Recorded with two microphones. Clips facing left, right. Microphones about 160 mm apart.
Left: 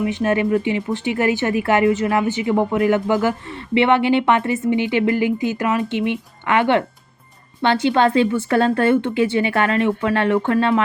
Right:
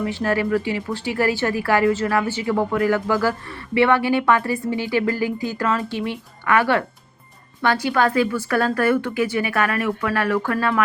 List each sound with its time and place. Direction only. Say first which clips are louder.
0.0 s speech: left 3 dB; 20° left (ahead or behind)